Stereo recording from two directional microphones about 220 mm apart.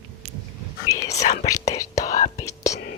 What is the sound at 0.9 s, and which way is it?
Whispering, 15° left (ahead or behind).